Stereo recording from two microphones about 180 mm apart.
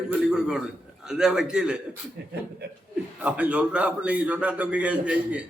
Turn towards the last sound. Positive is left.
turn(degrees=-5)  # may be behind; listen again after turning